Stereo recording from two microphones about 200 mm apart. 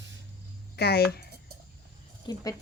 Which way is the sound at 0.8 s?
50° left (ahead or behind).